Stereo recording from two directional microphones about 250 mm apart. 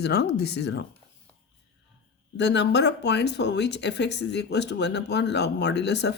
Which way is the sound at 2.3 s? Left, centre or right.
Left.